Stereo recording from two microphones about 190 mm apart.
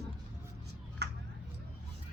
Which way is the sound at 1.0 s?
60° right (ahead or behind).